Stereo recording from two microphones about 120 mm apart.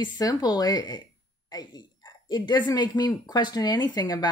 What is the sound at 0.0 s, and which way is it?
Speech, 30° left (ahead or behind).